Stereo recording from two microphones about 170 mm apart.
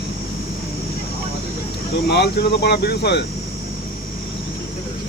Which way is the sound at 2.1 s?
75° left (ahead or behind).